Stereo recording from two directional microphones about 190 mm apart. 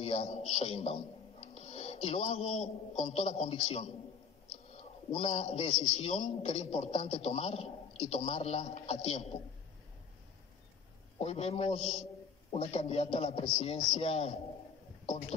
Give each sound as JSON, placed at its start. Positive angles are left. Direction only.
{"t": 0.0, "sound": "a man's voice", "side_deg": 35}
{"t": 11.1, "sound": "a man's voice", "side_deg": 35}